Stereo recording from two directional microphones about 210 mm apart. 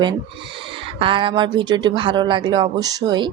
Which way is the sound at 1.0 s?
25° right (ahead or behind).